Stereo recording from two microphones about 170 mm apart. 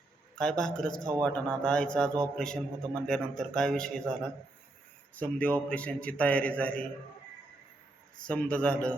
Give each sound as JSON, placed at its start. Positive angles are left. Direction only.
{"t": 0.3, "sound": "a man's voice", "side_deg": 5}
{"t": 8.3, "sound": "a man's voice", "side_deg": 5}